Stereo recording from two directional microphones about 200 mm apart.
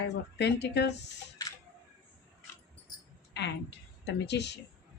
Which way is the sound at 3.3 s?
60° left (ahead or behind).